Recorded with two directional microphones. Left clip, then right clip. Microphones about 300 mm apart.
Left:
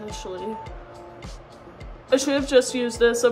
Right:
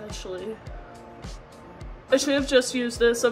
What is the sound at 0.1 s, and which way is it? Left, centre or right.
Speech, centre.